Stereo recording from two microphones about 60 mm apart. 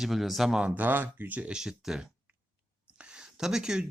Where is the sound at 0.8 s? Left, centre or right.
Right.